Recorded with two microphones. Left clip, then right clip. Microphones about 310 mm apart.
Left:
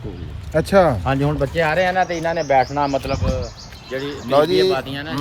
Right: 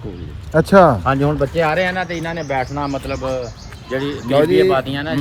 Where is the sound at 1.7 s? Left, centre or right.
Left.